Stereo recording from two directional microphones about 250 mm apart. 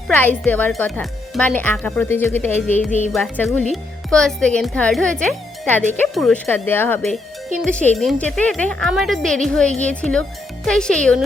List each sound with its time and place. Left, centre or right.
0.1 s speech: centre